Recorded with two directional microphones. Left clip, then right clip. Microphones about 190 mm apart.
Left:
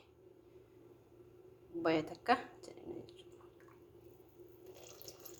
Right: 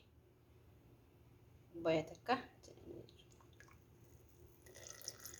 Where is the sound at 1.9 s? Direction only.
20° left (ahead or behind).